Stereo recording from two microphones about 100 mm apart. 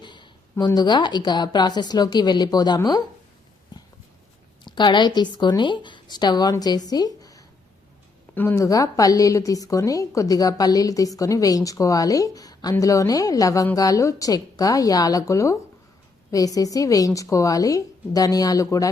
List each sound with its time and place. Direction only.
0.0 s a sound: 50° left (ahead or behind)
0.6 s speech: 45° left (ahead or behind)
4.6 s speech: 50° left (ahead or behind)
8.5 s a woman's voice: 35° left (ahead or behind)